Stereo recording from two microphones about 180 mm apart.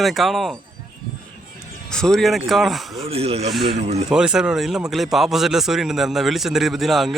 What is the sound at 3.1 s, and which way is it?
Speech, 35° right (ahead or behind).